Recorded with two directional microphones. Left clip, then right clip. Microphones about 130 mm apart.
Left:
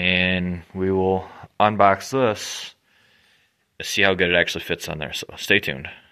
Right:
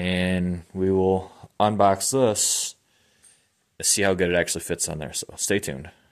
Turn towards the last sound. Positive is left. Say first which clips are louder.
# left 6 dB
turn(degrees=-30)  # may be behind; listen again after turning